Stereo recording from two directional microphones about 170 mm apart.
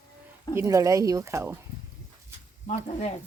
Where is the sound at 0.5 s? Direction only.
20° right (ahead or behind).